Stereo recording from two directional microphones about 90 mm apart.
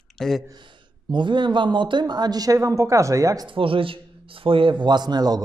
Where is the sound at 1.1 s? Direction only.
60° right (ahead or behind); by 3.5 s 40° right (ahead or behind).